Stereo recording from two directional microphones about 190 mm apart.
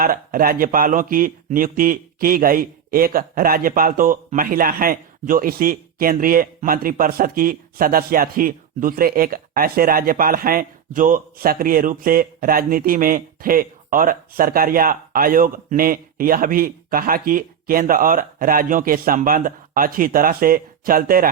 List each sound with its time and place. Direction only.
0.0 s speech: 50° right (ahead or behind)